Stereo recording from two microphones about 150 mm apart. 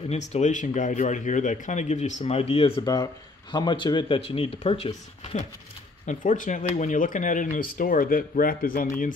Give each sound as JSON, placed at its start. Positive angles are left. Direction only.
{"t": 0.1, "sound": "speech", "side_deg": 50}
{"t": 2.8, "sound": "speech", "side_deg": 25}
{"t": 6.0, "sound": "speech", "side_deg": 60}